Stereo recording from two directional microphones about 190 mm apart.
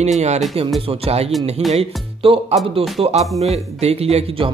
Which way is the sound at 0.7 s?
30° right (ahead or behind).